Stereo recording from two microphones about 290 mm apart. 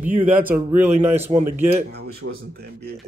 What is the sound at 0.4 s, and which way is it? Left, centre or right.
Speech, centre.